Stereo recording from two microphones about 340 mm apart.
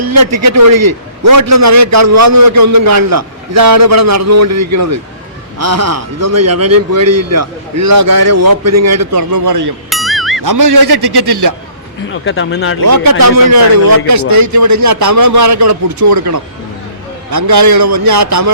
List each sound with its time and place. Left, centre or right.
0.0 s a man's voice: right
8.0 s a man's voice: right
8.6 s a man's voice: right
9.9 s music: centre
10.4 s a man's voice: right
12.1 s speech: left
13.1 s a man's voice: right